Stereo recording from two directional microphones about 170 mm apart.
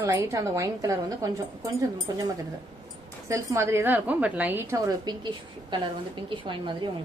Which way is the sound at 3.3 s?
15° right (ahead or behind).